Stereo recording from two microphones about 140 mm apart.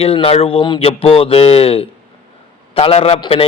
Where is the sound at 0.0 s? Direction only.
40° left (ahead or behind).